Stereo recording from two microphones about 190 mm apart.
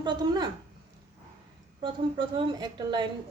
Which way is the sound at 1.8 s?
25° right (ahead or behind).